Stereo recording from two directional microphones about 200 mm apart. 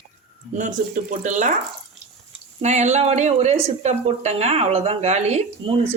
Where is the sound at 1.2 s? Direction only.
35° right (ahead or behind).